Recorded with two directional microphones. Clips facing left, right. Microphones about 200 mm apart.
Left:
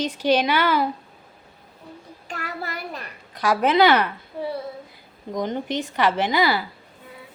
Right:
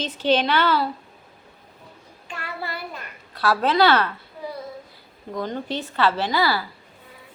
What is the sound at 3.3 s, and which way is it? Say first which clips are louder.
Speech: left 1 dB; 15° left (ahead or behind).